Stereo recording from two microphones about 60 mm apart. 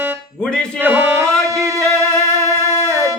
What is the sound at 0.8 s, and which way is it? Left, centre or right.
Music, right.